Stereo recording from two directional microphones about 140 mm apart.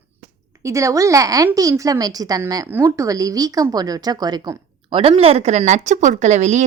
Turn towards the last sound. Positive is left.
turn(degrees=-55)  # may be behind; listen again after turning